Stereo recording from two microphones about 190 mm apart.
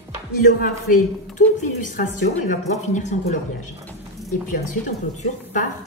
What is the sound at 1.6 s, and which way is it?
A woman's voice, 45° left (ahead or behind).